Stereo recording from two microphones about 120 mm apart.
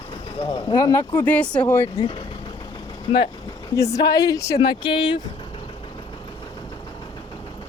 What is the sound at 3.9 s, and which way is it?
Speech, 30° left (ahead or behind).